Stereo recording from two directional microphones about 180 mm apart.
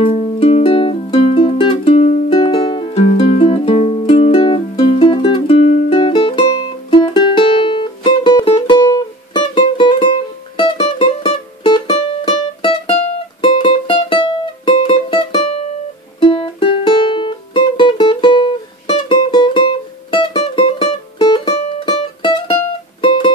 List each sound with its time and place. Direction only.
0.0 s music: 30° left (ahead or behind)
2.2 s music: 25° left (ahead or behind)
5.9 s music: 25° left (ahead or behind)